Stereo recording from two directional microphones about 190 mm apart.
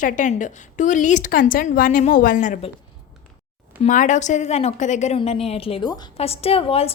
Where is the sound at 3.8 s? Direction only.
40° left (ahead or behind).